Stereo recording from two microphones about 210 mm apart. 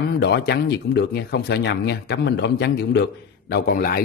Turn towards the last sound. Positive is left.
turn(degrees=45)  # may be behind; listen again after turning